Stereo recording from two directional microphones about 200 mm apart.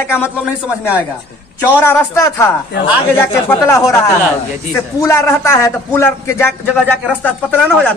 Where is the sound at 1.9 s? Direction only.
15° left (ahead or behind).